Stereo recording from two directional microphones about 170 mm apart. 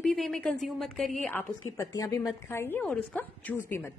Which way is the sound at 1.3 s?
15° left (ahead or behind).